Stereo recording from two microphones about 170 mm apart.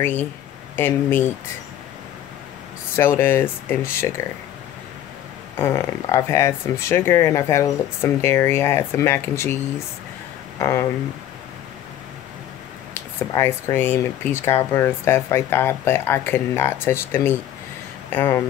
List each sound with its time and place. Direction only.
0.0 s speech: 10° left (ahead or behind)
3.0 s speech: 15° left (ahead or behind)
5.6 s speech: 15° left (ahead or behind)
10.6 s speech: 15° left (ahead or behind)
12.9 s speech: 15° left (ahead or behind)